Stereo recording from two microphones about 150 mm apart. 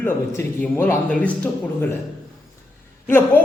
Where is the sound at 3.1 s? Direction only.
15° left (ahead or behind).